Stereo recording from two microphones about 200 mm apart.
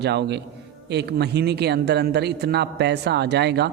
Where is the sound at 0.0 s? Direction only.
55° right (ahead or behind).